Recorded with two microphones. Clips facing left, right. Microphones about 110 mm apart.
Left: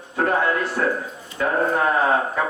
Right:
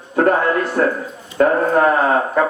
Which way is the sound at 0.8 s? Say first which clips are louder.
Right 5 dB; 50° right (ahead or behind).